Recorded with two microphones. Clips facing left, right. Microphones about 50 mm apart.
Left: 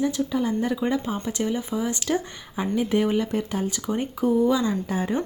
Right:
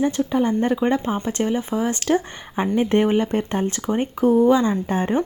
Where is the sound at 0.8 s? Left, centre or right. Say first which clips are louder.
Right 4 dB; right.